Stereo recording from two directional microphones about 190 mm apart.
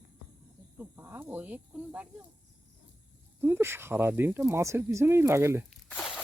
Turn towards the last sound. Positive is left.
turn(degrees=-5)  # may be behind; listen again after turning